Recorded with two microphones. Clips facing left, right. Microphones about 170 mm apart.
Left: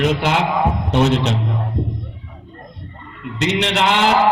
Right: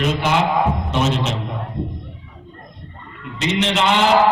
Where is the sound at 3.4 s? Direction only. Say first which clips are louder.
Left 1 dB; 65° left (ahead or behind).